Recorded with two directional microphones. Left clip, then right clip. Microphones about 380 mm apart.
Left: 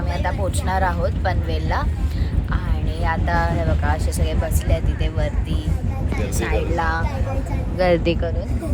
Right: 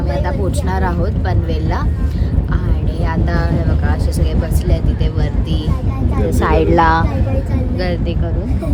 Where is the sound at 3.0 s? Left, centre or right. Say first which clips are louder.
Left 1 dB; centre.